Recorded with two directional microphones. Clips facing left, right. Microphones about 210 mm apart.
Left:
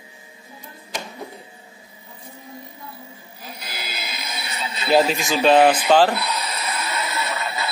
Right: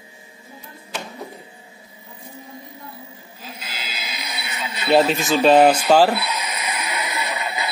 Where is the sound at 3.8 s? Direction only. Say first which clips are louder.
Left 2 dB; 55° left (ahead or behind).